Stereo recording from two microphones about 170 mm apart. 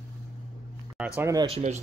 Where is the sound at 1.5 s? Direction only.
40° right (ahead or behind).